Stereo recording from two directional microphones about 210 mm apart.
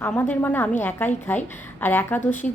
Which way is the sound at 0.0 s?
10° left (ahead or behind).